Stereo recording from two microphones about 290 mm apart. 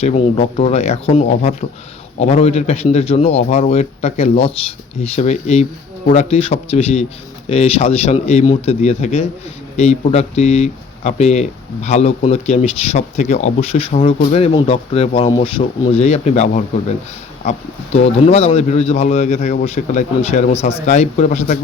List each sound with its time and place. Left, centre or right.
0.0 s speech: left
17.9 s speech: left